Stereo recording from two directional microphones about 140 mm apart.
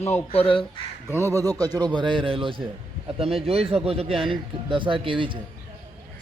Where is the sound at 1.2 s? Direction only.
20° right (ahead or behind).